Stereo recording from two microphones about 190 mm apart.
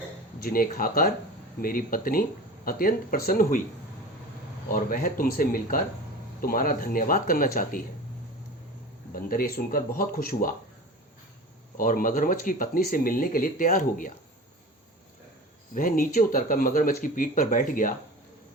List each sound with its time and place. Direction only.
0.4 s speech: 50° left (ahead or behind)
4.7 s speech: 45° left (ahead or behind)
9.1 s speech: 50° left (ahead or behind)
11.8 s speech: 45° left (ahead or behind)
15.7 s speech: 50° left (ahead or behind)